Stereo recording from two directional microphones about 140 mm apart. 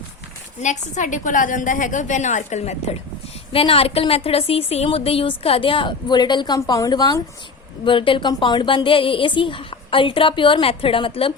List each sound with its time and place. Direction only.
0.6 s a woman's voice: 60° left (ahead or behind)
3.5 s a woman's voice: 40° left (ahead or behind)